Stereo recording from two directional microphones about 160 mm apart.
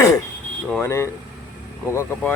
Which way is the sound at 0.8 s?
15° left (ahead or behind).